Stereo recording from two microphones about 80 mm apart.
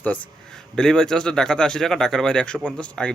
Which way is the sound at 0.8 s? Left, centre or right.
Centre.